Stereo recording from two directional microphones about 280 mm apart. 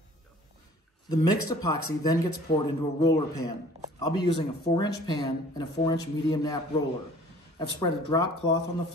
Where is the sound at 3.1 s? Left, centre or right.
Centre.